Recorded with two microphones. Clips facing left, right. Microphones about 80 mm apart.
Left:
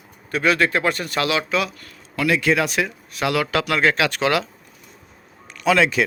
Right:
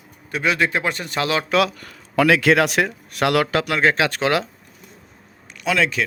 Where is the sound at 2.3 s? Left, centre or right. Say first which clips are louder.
Right 1 dB; right.